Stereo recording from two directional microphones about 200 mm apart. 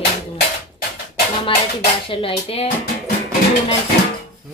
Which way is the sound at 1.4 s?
30° left (ahead or behind).